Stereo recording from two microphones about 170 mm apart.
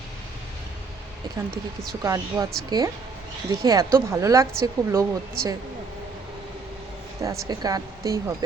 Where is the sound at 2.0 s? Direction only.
20° right (ahead or behind).